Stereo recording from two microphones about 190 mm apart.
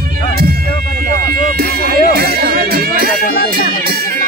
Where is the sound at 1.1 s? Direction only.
55° right (ahead or behind).